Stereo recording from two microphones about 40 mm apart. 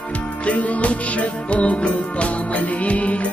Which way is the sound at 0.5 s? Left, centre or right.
Left.